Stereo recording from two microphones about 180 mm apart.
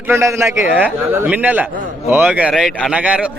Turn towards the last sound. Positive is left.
turn(degrees=-5)  # may be behind; listen again after turning